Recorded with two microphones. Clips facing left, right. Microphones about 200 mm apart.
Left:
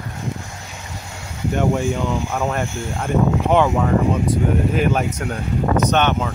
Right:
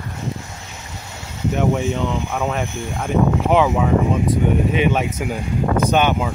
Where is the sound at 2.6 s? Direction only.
15° right (ahead or behind).